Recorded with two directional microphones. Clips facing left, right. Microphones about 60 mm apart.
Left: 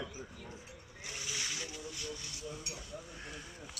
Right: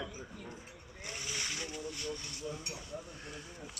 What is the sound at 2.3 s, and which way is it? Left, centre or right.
Speech, right.